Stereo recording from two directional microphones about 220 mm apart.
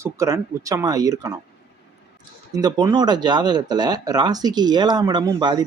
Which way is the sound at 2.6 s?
20° right (ahead or behind).